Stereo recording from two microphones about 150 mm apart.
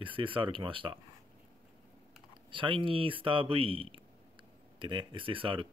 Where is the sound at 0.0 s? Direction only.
35° right (ahead or behind).